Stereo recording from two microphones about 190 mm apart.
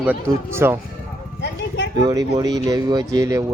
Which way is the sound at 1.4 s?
65° left (ahead or behind).